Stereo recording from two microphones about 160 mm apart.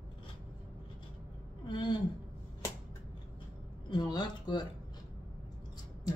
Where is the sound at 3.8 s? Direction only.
30° left (ahead or behind).